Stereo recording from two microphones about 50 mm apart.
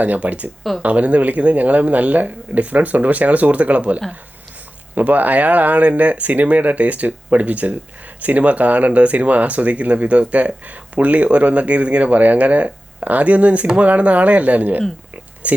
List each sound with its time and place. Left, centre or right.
0.0 s speech: right